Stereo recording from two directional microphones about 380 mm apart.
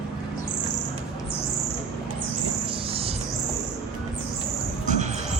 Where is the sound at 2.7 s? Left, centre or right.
Centre.